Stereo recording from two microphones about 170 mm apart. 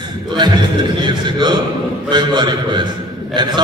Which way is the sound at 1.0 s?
25° right (ahead or behind).